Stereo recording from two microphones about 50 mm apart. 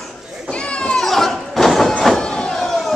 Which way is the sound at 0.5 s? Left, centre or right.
Centre.